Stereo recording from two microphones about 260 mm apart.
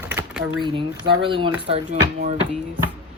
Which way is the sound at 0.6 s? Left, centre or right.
Centre.